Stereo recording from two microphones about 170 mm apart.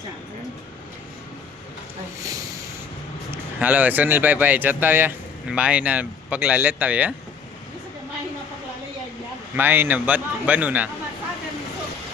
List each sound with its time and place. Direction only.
2.2 s a sound: 20° right (ahead or behind)
3.3 s speech: 10° right (ahead or behind)
9.6 s speech: 10° right (ahead or behind)